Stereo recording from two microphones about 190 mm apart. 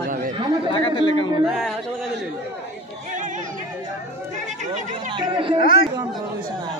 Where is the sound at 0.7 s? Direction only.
25° left (ahead or behind).